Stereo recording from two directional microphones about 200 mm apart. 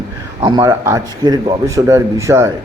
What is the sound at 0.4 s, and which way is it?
A man's voice, 20° right (ahead or behind).